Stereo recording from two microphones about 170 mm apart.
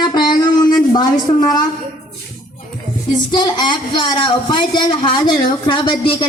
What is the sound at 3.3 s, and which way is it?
A woman's voice, 25° left (ahead or behind).